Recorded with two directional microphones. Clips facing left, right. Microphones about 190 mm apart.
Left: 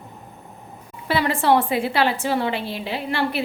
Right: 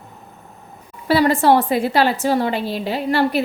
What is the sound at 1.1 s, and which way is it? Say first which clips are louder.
A woman's voice: right 5 dB; 40° right (ahead or behind).